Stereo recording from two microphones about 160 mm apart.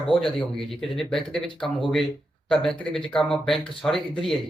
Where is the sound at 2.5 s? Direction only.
5° left (ahead or behind).